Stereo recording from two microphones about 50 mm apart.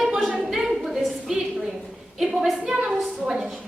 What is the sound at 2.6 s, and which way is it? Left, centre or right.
Speech, centre.